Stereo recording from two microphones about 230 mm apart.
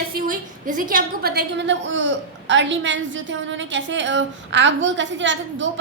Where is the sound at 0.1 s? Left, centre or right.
Right.